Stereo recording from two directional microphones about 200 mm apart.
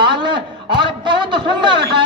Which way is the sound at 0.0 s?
25° right (ahead or behind).